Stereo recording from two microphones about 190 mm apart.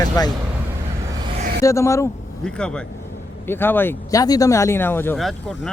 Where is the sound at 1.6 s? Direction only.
15° left (ahead or behind).